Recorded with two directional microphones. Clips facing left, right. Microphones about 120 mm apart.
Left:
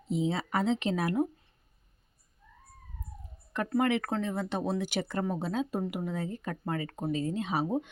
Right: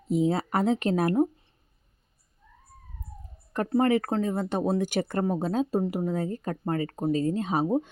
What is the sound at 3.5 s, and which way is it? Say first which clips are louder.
Speech: right 5 dB; 35° right (ahead or behind).